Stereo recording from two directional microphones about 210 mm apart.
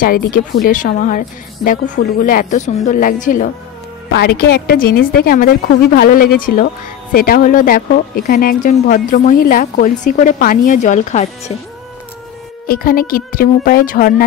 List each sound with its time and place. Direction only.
0.0 s speech: 45° left (ahead or behind)
4.1 s a woman's voice: 50° left (ahead or behind); by 11.5 s 35° left (ahead or behind)
12.6 s a woman's voice: 45° left (ahead or behind)